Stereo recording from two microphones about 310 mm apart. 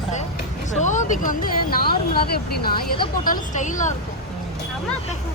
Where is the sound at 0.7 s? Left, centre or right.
Left.